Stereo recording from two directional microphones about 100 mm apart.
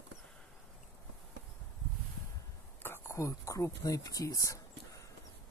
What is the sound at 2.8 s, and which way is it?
Speech, 25° left (ahead or behind).